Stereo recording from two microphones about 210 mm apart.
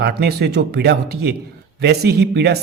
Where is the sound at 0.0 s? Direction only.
50° right (ahead or behind).